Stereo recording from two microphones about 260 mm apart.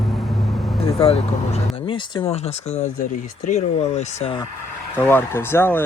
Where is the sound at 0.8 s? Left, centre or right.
Left.